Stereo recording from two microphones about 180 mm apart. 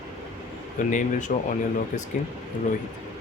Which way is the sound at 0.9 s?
45° left (ahead or behind).